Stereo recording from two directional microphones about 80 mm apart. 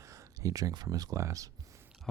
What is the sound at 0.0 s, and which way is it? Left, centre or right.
Speech, right.